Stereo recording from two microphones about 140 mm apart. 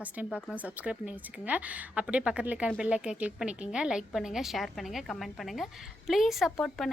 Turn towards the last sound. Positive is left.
turn(degrees=0)  # may be behind; listen again after turning